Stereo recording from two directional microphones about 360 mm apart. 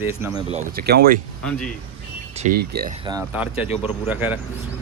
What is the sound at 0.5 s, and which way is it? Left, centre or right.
Speech, right.